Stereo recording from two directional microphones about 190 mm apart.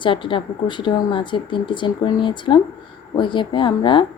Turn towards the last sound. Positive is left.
turn(degrees=25)  # may be behind; listen again after turning